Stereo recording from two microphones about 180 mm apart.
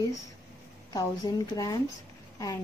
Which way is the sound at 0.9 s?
20° left (ahead or behind).